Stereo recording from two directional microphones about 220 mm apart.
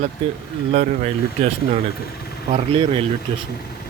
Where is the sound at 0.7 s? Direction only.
30° right (ahead or behind).